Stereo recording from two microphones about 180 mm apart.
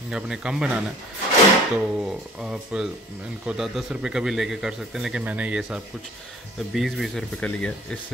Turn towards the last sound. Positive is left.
turn(degrees=5)  # may be behind; listen again after turning